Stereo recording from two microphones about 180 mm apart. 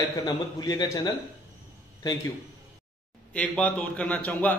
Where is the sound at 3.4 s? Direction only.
5° left (ahead or behind).